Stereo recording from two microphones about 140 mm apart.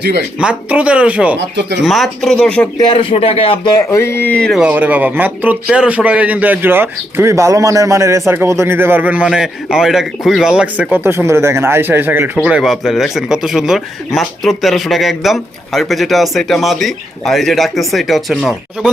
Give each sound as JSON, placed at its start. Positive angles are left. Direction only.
{"t": 0.3, "sound": "a man's voice", "side_deg": -10}
{"t": 2.9, "sound": "speech", "side_deg": 40}
{"t": 3.9, "sound": "speech", "side_deg": 20}
{"t": 4.6, "sound": "a man's voice", "side_deg": -10}